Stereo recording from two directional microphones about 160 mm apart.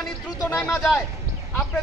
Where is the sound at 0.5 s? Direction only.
15° left (ahead or behind).